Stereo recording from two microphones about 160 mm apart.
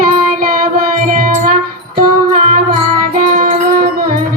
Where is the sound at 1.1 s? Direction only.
60° right (ahead or behind).